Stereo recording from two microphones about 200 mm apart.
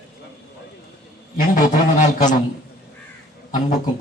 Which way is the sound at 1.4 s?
45° left (ahead or behind).